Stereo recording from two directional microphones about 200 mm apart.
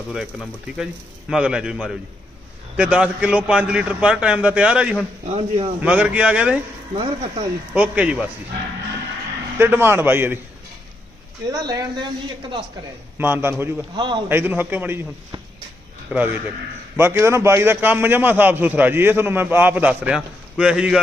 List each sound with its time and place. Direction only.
0.1 s a man's voice: 5° right (ahead or behind)
5.2 s a man's voice: 35° right (ahead or behind)
5.8 s a man's voice: 5° right (ahead or behind)
6.9 s speech: 30° right (ahead or behind)
7.7 s a man's voice: 5° right (ahead or behind)
9.6 s a man's voice: 10° right (ahead or behind)
11.5 s speech: 15° right (ahead or behind)
13.1 s a man's voice: 10° right (ahead or behind)
13.9 s speech: 25° right (ahead or behind)
14.3 s a man's voice: 10° right (ahead or behind)